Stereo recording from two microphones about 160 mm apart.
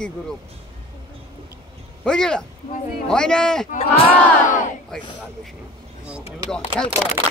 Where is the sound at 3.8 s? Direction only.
35° left (ahead or behind).